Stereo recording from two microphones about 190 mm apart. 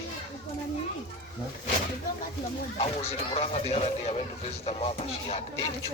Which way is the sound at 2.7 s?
25° left (ahead or behind).